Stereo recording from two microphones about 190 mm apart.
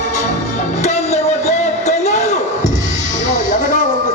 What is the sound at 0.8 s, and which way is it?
Music, 35° left (ahead or behind).